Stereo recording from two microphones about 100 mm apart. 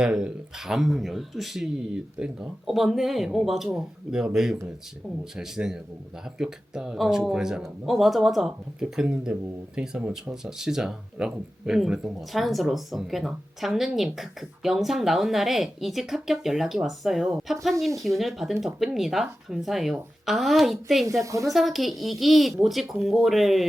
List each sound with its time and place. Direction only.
0.0 s a man's voice: 10° right (ahead or behind)
21.2 s a woman's voice: 35° right (ahead or behind)
21.5 s speech: centre (ahead or behind)